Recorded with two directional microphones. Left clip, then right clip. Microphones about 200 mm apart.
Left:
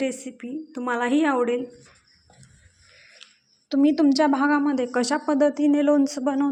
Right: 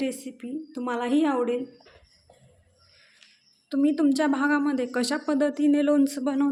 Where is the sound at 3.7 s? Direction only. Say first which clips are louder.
Left 4 dB; 15° left (ahead or behind).